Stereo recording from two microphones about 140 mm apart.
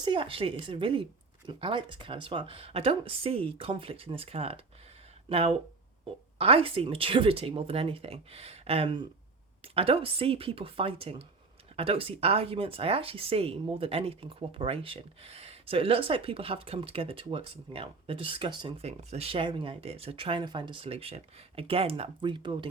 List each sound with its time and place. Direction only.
0.0 s speech: 35° right (ahead or behind)
18.8 s speech: 50° right (ahead or behind)